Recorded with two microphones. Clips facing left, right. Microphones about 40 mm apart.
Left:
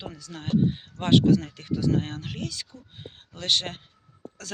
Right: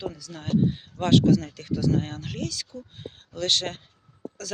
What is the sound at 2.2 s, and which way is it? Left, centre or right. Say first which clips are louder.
Speech: right 2 dB; centre.